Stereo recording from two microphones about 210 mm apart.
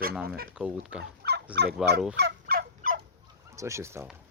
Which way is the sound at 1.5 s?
50° right (ahead or behind).